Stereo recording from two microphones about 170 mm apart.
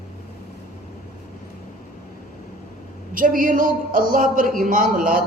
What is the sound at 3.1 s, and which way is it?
A man's voice, 55° right (ahead or behind).